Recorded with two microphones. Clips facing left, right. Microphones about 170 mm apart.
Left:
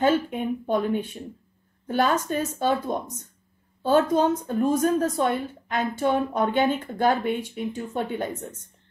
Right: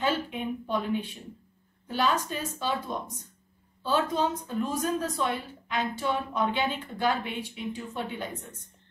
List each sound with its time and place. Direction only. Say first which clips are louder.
0.0 s a woman's voice: left 7 dB; 50° left (ahead or behind)